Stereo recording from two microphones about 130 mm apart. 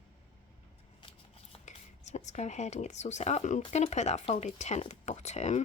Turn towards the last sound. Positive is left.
turn(degrees=60)  # may be behind; listen again after turning